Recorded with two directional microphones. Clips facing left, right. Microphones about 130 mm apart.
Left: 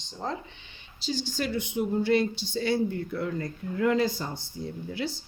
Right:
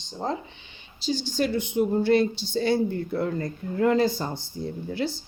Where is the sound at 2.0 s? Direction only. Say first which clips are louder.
Right 3 dB; 35° right (ahead or behind).